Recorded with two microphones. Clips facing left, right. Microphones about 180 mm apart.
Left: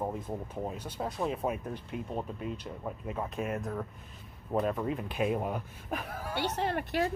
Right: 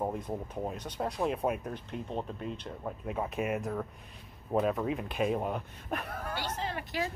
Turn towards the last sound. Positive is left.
turn(degrees=55)  # may be behind; listen again after turning